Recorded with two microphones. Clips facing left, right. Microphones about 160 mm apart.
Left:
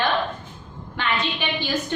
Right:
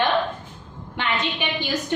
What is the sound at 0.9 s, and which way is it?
Speech, 20° right (ahead or behind).